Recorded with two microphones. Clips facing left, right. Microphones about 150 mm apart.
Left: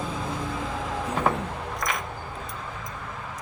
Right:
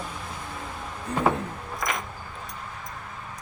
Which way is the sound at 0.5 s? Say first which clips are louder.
Left 7 dB; 90° left.